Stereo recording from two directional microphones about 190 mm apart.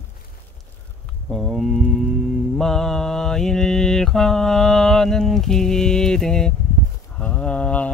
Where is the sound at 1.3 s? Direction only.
Centre (ahead or behind).